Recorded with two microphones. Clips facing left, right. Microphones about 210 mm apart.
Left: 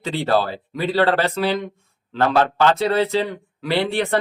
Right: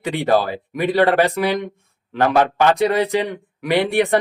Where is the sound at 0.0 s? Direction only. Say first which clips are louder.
Right 2 dB; 15° right (ahead or behind).